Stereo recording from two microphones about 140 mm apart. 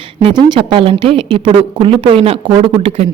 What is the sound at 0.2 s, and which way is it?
Speech, 30° right (ahead or behind).